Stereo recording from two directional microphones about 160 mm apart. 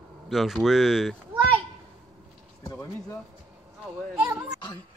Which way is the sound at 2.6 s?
15° left (ahead or behind).